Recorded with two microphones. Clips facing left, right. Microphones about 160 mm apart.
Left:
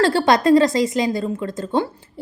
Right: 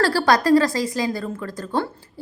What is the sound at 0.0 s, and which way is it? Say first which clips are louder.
A woman's voice: left 3 dB; 20° left (ahead or behind).